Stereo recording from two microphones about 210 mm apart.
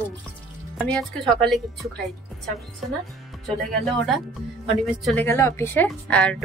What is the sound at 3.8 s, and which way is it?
A woman's voice, centre (ahead or behind).